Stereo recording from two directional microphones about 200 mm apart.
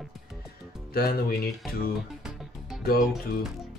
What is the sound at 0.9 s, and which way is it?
Speech, 50° left (ahead or behind).